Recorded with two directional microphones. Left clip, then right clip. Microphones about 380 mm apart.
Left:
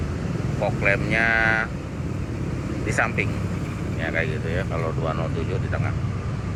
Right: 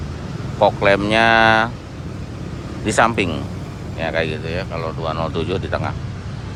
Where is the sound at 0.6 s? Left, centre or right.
Centre.